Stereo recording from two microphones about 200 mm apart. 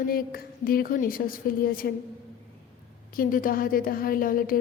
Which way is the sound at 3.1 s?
45° left (ahead or behind).